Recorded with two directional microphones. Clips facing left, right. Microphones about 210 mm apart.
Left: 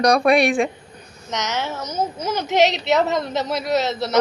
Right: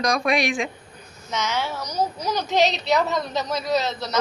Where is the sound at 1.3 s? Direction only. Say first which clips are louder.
Left 1 dB; 20° left (ahead or behind).